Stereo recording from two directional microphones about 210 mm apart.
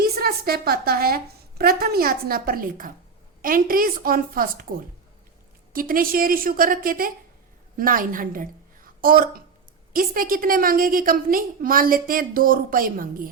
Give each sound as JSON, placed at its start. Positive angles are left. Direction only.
{"t": 0.0, "sound": "a woman's voice", "side_deg": -45}